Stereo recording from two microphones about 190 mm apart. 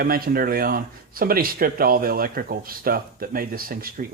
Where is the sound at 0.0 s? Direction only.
50° right (ahead or behind).